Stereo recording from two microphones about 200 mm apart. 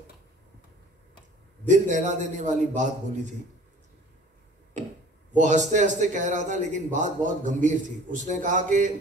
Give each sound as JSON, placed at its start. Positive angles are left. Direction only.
{"t": 1.7, "sound": "a man's voice", "side_deg": -40}
{"t": 5.3, "sound": "a man's voice", "side_deg": -40}